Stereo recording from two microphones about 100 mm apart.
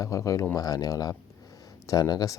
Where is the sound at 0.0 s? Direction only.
35° left (ahead or behind).